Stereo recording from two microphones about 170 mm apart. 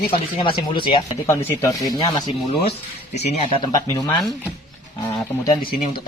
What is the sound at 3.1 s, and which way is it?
Speech, 40° left (ahead or behind).